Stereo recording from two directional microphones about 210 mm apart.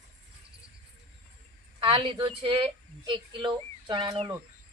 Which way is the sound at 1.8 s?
25° right (ahead or behind).